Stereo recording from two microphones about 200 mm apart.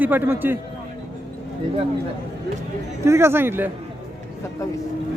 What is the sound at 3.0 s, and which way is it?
Speech, 10° right (ahead or behind).